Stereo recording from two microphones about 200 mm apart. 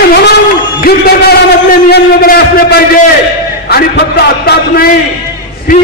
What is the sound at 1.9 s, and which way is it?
A man's voice, 50° left (ahead or behind).